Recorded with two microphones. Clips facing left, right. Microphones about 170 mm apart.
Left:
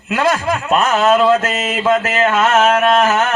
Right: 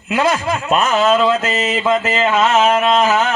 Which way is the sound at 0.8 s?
Centre (ahead or behind).